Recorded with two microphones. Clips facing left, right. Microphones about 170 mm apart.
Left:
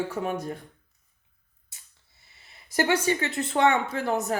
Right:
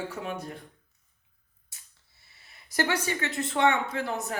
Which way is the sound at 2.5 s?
25° left (ahead or behind).